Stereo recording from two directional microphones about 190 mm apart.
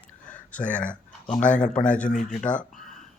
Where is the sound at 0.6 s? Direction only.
40° left (ahead or behind).